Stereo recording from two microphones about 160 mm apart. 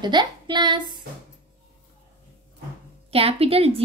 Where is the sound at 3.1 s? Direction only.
35° right (ahead or behind).